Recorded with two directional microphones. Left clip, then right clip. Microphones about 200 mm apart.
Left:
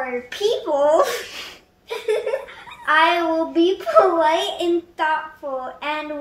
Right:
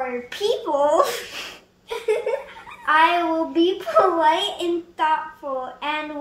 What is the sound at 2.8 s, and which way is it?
A child's voice, 15° right (ahead or behind).